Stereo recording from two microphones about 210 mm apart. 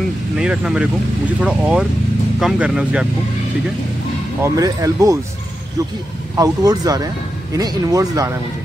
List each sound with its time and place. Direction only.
0.4 s speech: 5° right (ahead or behind)
4.4 s speech: 15° right (ahead or behind)
6.3 s speech: 15° right (ahead or behind)